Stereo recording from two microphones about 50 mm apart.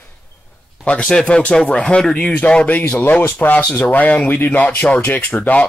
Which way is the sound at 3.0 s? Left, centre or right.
Left.